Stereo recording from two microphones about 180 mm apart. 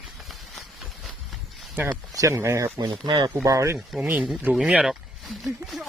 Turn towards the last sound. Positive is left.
turn(degrees=0)  # may be behind; listen again after turning